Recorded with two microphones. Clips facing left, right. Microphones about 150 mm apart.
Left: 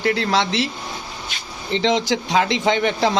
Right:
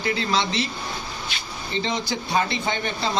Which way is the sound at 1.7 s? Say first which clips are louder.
Left 8 dB; 85° left.